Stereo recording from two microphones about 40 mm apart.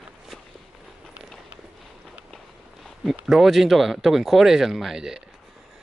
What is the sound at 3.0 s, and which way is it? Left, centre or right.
Speech, centre.